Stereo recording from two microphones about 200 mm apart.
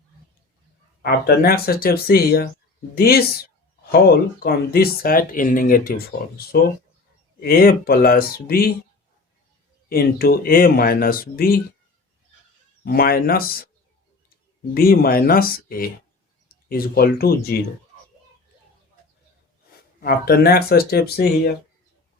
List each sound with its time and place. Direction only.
1.0 s speech: 50° left (ahead or behind)
4.4 s speech: 50° left (ahead or behind)
9.9 s speech: 50° left (ahead or behind)
12.8 s speech: 50° left (ahead or behind)
14.7 s speech: 50° left (ahead or behind)
20.0 s speech: 50° left (ahead or behind)